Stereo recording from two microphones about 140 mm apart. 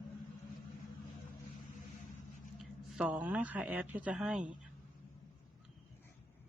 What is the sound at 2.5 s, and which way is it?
A woman's voice, 5° right (ahead or behind).